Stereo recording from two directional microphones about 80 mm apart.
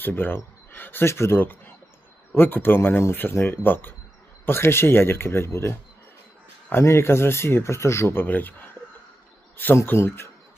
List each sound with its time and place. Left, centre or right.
0.0 s speech: left
9.7 s speech: left